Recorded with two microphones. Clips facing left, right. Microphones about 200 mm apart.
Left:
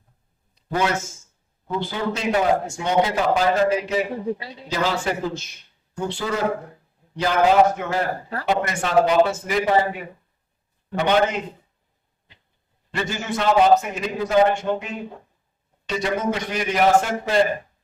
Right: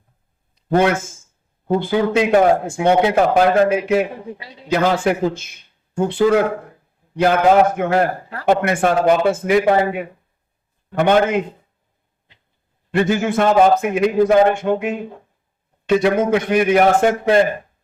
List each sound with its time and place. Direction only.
0.8 s a man's voice: 55° right (ahead or behind)
12.9 s speech: 55° right (ahead or behind)